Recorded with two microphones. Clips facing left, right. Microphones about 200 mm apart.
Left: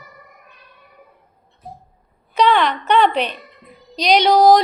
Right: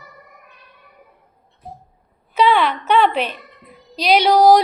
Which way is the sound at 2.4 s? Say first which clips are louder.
Even; 5° right (ahead or behind).